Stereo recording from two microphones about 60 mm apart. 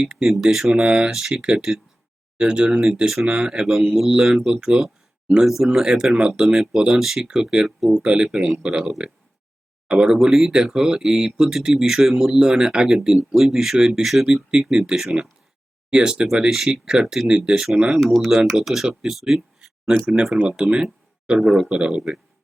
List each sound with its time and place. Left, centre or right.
0.0 s speech: centre
0.3 s speech: centre
14.6 s speech: centre
18.0 s speech: centre